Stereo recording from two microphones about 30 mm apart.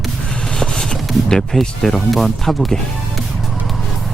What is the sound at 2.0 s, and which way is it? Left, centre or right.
Speech, centre.